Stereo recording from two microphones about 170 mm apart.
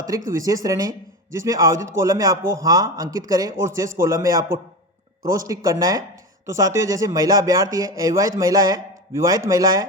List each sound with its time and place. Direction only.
0.3 s speech: 20° right (ahead or behind)